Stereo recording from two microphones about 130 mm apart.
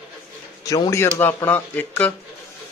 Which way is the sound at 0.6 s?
25° left (ahead or behind).